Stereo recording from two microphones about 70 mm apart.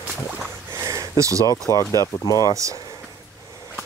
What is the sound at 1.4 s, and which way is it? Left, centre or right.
Speech, left.